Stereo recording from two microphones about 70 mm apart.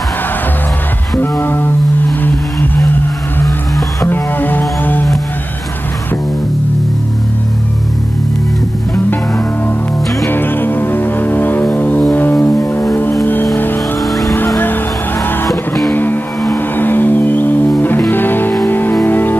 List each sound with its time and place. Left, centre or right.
1.4 s music: left
2.2 s vehicle: left
4.0 s music: left
8.9 s music: left
15.9 s music: left